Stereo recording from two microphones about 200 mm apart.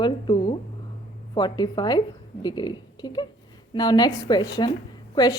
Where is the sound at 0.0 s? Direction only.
25° left (ahead or behind).